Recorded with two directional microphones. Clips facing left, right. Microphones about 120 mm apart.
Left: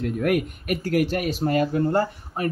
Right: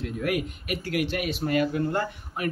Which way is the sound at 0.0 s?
50° left (ahead or behind).